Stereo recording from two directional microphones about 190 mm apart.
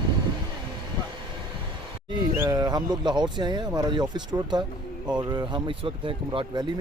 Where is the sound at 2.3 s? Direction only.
20° right (ahead or behind).